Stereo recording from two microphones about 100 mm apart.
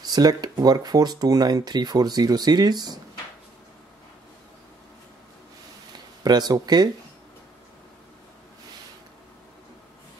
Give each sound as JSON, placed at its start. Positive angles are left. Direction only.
{"t": 0.0, "sound": "speech", "side_deg": -40}
{"t": 6.2, "sound": "speech", "side_deg": -40}